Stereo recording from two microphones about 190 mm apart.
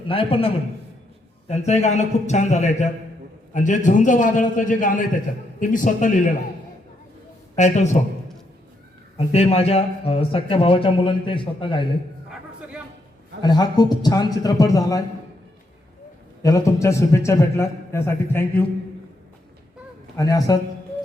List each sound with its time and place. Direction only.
0.1 s a man's voice: 30° left (ahead or behind)
7.5 s a man's voice: 40° left (ahead or behind)
9.1 s a man's voice: 35° left (ahead or behind)
13.4 s a man's voice: 20° left (ahead or behind)
16.4 s a man's voice: 15° left (ahead or behind)
20.1 s a man's voice: 20° left (ahead or behind)